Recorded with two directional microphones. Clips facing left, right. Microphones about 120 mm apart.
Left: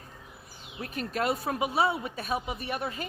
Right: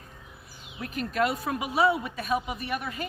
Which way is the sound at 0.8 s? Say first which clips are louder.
Right 4 dB; 30° left (ahead or behind).